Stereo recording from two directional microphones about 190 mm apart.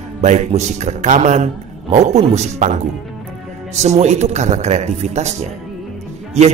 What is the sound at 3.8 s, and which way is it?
Speech, 35° right (ahead or behind).